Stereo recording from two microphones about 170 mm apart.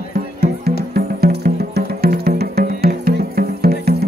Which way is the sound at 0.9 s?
70° right (ahead or behind).